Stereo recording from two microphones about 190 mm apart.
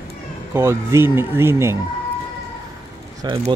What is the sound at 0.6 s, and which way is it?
Speech, 15° right (ahead or behind).